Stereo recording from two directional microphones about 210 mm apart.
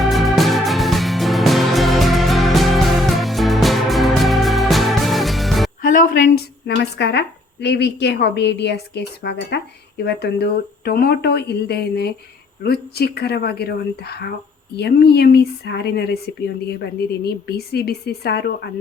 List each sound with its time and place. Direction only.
0.0 s music: centre (ahead or behind)
5.9 s speech: 40° left (ahead or behind)